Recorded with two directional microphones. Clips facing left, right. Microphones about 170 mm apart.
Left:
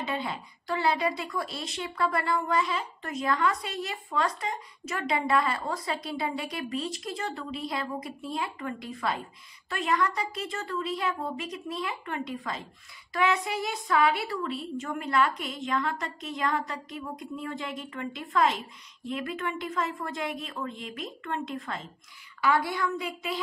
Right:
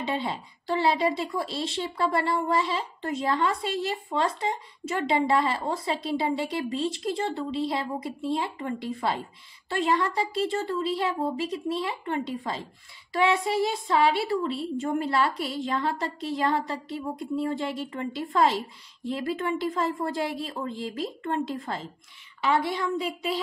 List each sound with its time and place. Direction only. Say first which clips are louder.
0.0 s speech: right 3 dB; 25° right (ahead or behind)